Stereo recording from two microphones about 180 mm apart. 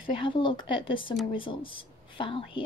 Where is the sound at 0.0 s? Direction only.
30° left (ahead or behind).